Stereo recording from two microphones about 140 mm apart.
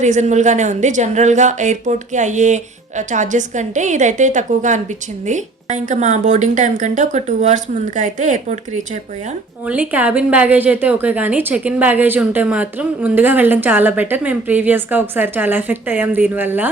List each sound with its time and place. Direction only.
0.0 s a woman's voice: 60° right (ahead or behind)
9.6 s a woman's voice: 10° right (ahead or behind)